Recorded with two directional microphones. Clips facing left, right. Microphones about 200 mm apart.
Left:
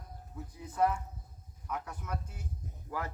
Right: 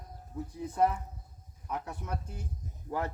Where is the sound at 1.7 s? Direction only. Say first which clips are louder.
Right 2 dB; 30° right (ahead or behind).